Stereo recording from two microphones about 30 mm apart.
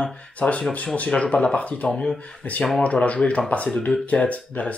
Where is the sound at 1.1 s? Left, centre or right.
Left.